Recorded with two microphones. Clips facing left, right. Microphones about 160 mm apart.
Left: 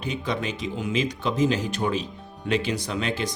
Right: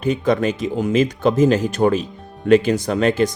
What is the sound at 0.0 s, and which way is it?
Speech, 50° right (ahead or behind).